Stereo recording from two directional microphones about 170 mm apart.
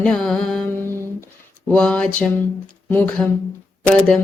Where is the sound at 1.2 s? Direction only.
10° left (ahead or behind).